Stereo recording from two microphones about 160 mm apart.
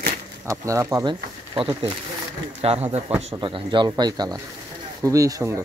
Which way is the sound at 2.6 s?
40° right (ahead or behind).